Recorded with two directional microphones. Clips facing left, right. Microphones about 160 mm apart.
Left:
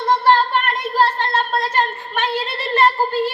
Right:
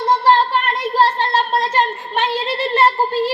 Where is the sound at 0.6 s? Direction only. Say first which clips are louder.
Right 2 dB; 30° right (ahead or behind).